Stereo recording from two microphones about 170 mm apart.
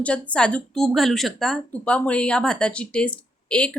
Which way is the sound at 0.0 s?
5° left (ahead or behind).